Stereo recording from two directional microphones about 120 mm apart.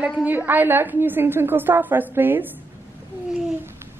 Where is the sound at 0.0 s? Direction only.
15° right (ahead or behind).